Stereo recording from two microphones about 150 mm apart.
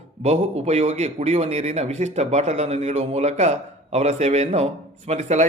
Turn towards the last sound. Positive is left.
turn(degrees=-50)  # may be behind; listen again after turning